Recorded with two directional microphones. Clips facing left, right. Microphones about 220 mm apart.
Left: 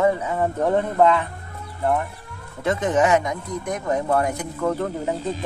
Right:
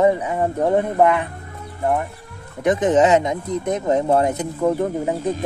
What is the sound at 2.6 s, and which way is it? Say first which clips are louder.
Speech: right 4 dB; 20° right (ahead or behind).